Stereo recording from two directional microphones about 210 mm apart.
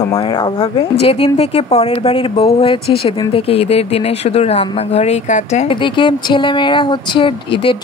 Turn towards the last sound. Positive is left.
turn(degrees=25)  # may be behind; listen again after turning